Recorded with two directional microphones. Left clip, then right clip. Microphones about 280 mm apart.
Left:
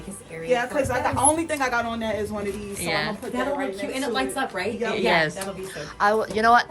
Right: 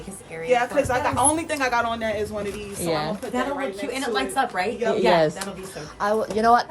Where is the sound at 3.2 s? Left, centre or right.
Centre.